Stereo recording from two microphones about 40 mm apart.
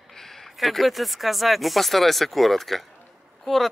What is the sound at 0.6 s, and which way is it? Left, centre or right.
Speech, centre.